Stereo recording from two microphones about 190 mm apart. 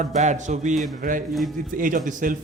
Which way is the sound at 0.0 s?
40° right (ahead or behind).